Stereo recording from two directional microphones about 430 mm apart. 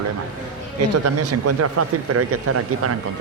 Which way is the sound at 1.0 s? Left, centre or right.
Right.